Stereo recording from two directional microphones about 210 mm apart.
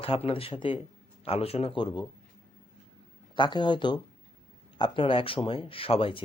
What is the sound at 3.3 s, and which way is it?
Speech, 20° left (ahead or behind).